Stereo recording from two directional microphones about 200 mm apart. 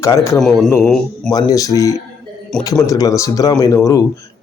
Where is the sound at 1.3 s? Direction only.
20° left (ahead or behind).